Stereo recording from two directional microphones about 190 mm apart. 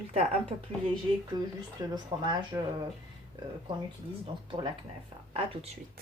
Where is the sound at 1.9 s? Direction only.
25° right (ahead or behind).